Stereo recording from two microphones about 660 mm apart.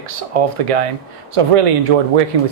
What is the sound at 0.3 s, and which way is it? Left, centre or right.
Speech, right.